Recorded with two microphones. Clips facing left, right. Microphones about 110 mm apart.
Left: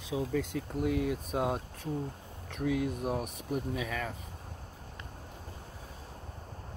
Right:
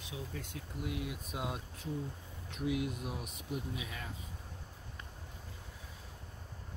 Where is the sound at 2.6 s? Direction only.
40° left (ahead or behind); by 4.2 s 60° left (ahead or behind).